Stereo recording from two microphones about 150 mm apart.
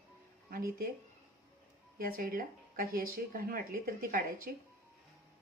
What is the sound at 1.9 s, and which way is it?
Speech, 70° right (ahead or behind).